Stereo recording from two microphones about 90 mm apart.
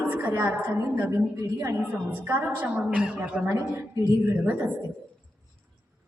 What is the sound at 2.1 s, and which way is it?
A woman's voice, 20° right (ahead or behind).